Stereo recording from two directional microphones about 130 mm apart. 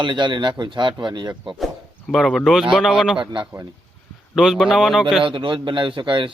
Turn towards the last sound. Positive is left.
turn(degrees=-40)  # may be behind; listen again after turning